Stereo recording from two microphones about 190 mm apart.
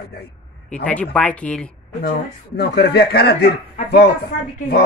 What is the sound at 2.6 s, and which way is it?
Speech, 55° left (ahead or behind).